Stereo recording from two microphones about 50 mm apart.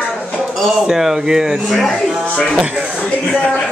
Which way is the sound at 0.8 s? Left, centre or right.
Centre.